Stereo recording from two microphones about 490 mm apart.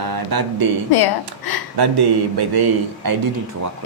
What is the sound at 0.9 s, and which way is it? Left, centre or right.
Speech, left.